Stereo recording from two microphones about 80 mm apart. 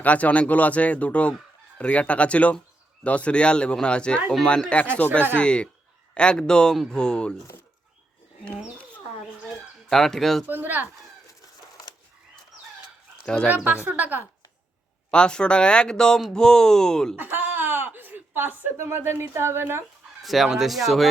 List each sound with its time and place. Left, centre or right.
0.0 s speech: centre
9.9 s speech: centre
10.5 s speech: right
13.2 s speech: centre
13.8 s speech: right
15.1 s speech: centre
17.2 s speech: right
20.2 s speech: centre